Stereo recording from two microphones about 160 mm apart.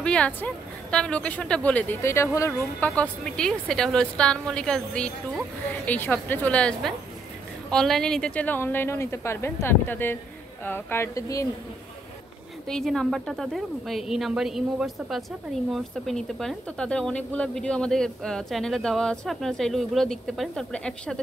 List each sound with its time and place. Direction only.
0.0 s speech: 5° left (ahead or behind)
3.0 s speech: 5° left (ahead or behind); by 11.4 s 20° left (ahead or behind)
12.6 s speech: 5° left (ahead or behind)